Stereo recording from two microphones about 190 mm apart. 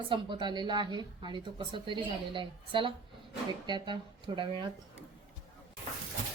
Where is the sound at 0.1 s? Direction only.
25° right (ahead or behind).